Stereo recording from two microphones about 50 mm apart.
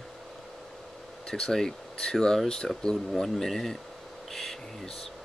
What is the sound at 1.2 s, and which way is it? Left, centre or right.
Speech, centre.